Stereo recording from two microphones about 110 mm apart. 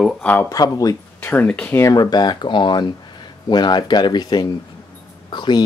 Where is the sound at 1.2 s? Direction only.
15° left (ahead or behind).